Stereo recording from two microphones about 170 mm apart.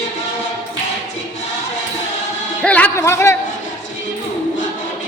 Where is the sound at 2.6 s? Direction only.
10° left (ahead or behind).